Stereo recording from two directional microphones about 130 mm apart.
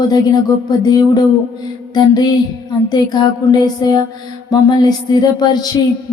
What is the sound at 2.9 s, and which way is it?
Speech, 30° left (ahead or behind).